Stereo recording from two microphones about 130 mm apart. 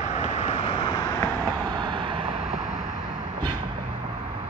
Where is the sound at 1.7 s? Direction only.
35° right (ahead or behind).